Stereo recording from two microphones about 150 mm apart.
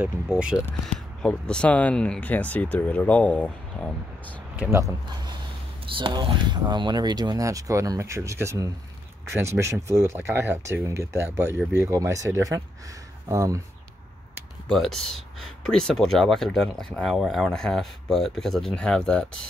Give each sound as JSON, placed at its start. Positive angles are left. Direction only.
{"t": 0.0, "sound": "speech", "side_deg": -5}
{"t": 0.6, "sound": "speech", "side_deg": 5}
{"t": 4.6, "sound": "speech", "side_deg": -20}
{"t": 14.7, "sound": "speech", "side_deg": 0}